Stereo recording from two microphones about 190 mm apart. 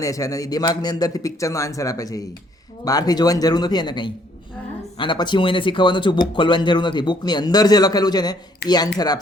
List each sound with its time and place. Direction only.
0.0 s a man's voice: 15° left (ahead or behind)
8.6 s speech: 60° left (ahead or behind)